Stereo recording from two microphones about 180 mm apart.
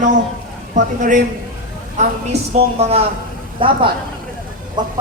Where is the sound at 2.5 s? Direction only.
35° right (ahead or behind).